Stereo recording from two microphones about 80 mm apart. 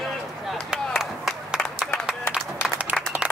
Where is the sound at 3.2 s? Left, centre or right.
Centre.